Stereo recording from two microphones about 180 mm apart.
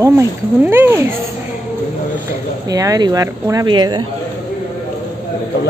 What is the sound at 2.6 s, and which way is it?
Speech, 20° right (ahead or behind).